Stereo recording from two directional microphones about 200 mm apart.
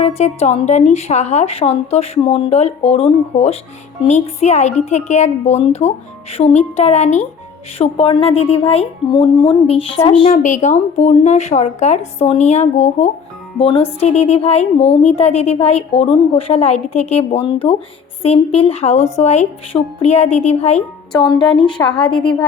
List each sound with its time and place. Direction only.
0.0 s a woman's voice: 35° left (ahead or behind)
21.4 s a woman's voice: 5° left (ahead or behind)
21.8 s speech: 25° left (ahead or behind)